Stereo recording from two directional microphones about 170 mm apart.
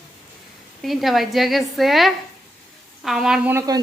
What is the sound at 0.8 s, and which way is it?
A woman's voice, centre (ahead or behind).